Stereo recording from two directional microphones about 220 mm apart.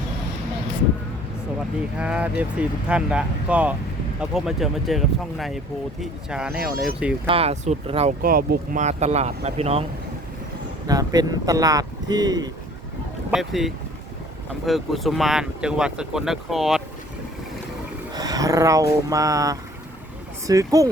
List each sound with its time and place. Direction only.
2.0 s speech: 5° right (ahead or behind)
7.3 s speech: 25° right (ahead or behind)
8.2 s speech: 40° right (ahead or behind)
10.8 s speech: 15° right (ahead or behind)
13.3 s speech: centre (ahead or behind)
18.1 s speech: 15° right (ahead or behind)